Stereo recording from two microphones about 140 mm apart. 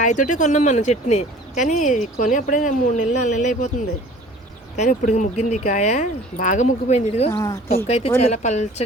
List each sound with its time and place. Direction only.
0.0 s speech: 65° left (ahead or behind)
4.8 s speech: 60° left (ahead or behind)
7.3 s speech: 20° left (ahead or behind)
8.2 s speech: 55° left (ahead or behind)